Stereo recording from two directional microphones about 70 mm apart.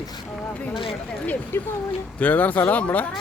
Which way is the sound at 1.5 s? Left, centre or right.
Left.